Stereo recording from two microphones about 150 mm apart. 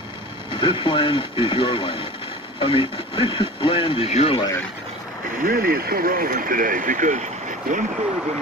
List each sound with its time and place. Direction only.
0.5 s speech: 35° left (ahead or behind)
5.3 s speech: 75° right (ahead or behind); by 7.2 s 55° right (ahead or behind)